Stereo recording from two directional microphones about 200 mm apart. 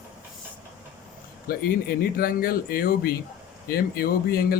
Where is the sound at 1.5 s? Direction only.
50° left (ahead or behind).